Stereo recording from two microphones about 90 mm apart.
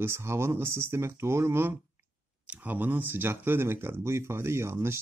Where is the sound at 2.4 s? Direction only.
15° right (ahead or behind).